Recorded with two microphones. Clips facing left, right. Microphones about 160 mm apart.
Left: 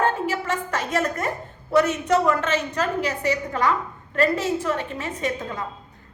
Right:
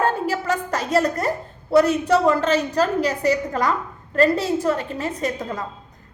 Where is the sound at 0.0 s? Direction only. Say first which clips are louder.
Right 2 dB; 40° right (ahead or behind).